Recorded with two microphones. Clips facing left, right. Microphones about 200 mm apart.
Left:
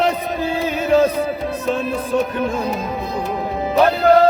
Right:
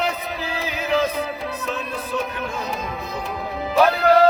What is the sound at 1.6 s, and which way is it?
Music, 45° left (ahead or behind).